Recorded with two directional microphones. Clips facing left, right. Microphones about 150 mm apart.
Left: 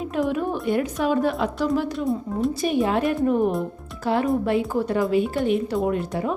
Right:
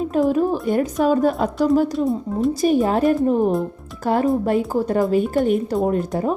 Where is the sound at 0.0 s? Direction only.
40° right (ahead or behind).